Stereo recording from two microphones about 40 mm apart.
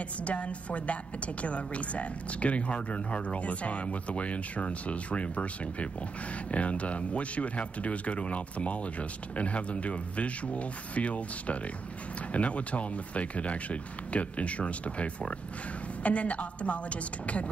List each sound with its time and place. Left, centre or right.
0.2 s a woman's voice: left